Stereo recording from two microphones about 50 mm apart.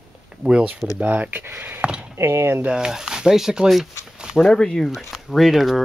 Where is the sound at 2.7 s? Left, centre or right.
Centre.